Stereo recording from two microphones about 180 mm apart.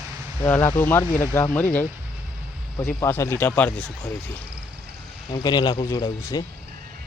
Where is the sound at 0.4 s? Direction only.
15° left (ahead or behind).